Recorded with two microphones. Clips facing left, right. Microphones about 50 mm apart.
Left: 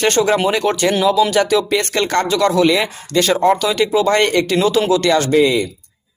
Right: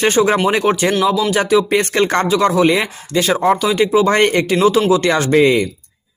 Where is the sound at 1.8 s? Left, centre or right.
Right.